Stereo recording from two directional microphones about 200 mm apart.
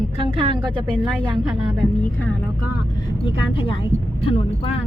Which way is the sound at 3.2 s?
25° left (ahead or behind).